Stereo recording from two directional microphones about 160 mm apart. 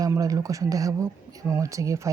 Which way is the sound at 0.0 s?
20° right (ahead or behind).